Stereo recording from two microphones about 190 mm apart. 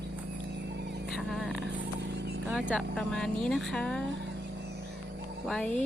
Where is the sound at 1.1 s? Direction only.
Centre (ahead or behind).